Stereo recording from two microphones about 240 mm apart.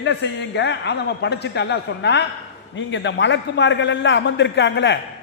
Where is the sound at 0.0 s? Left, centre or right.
Left.